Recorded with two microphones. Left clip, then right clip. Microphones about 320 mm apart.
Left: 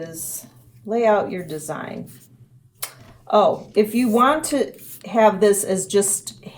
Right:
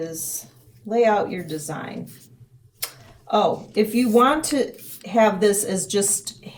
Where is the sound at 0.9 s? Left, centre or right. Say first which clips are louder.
Right 1 dB; centre.